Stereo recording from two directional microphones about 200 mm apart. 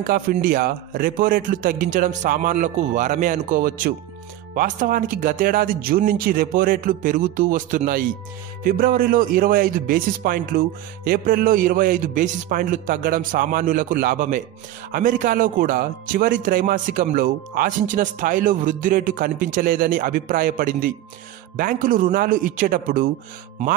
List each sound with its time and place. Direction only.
0.0 s speech: 45° right (ahead or behind)